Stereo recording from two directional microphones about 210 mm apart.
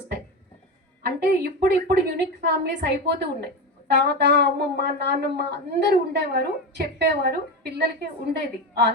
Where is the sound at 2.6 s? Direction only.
50° right (ahead or behind).